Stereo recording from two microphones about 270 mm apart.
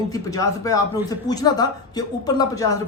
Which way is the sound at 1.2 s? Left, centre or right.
Centre.